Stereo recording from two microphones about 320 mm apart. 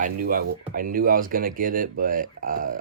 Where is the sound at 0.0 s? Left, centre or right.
Right.